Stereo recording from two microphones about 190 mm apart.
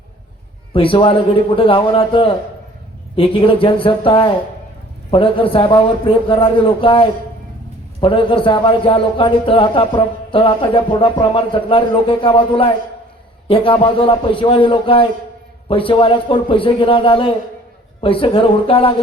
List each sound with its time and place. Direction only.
0.7 s a man's voice: 25° left (ahead or behind)